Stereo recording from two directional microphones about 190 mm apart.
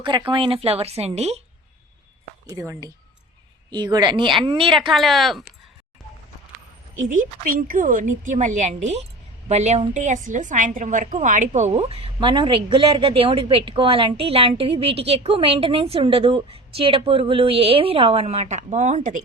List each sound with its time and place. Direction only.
0.0 s a woman's voice: 25° right (ahead or behind)
2.5 s speech: 15° right (ahead or behind)
4.9 s speech: centre (ahead or behind)
6.9 s a woman's voice: 45° right (ahead or behind)